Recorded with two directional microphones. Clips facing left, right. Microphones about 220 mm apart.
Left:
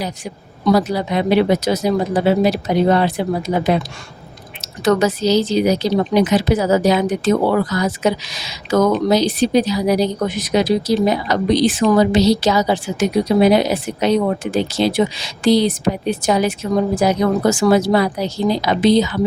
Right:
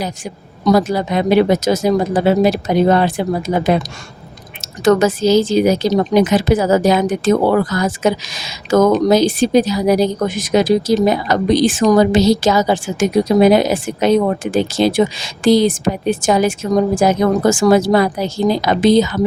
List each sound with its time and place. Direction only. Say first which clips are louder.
0.6 s a woman's voice: right 2 dB; 45° right (ahead or behind)